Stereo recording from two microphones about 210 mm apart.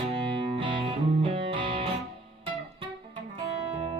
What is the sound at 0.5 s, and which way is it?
Music, 25° right (ahead or behind).